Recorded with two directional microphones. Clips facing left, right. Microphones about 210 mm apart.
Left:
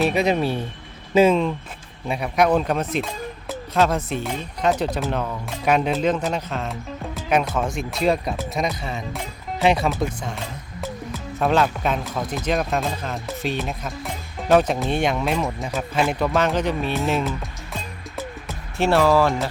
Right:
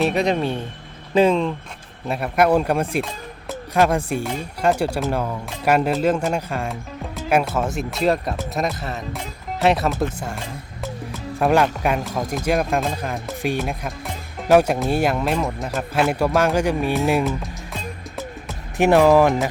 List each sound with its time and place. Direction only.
0.0 s speech: centre (ahead or behind)
18.8 s speech: 15° right (ahead or behind)